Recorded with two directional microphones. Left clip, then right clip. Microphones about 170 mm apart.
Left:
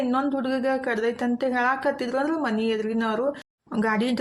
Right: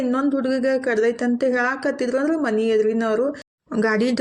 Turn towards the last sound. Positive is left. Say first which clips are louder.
# right 4 dB
turn(degrees=-20)  # may be behind; listen again after turning